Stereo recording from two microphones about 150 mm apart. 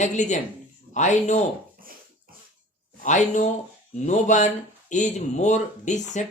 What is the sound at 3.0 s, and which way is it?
Speech, 55° left (ahead or behind).